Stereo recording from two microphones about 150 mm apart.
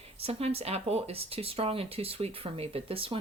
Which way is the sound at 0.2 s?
40° right (ahead or behind).